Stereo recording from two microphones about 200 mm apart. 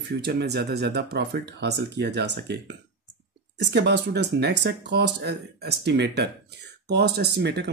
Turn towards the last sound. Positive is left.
turn(degrees=-60)  # may be behind; listen again after turning